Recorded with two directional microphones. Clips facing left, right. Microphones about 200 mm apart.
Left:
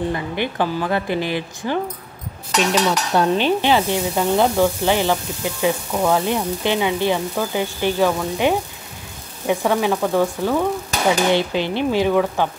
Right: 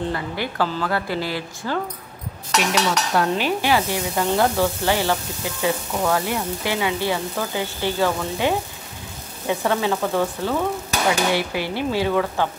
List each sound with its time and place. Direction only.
0.1 s a woman's voice: 20° left (ahead or behind)